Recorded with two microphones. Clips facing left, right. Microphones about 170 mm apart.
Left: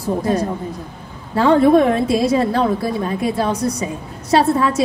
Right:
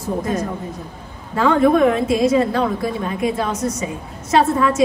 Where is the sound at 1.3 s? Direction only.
35° left (ahead or behind).